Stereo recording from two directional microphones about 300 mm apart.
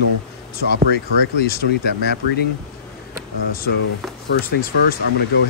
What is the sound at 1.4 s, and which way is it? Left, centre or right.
Speech, left.